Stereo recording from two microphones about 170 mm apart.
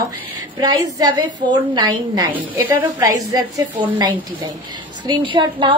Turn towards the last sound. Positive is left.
turn(degrees=-30)  # may be behind; listen again after turning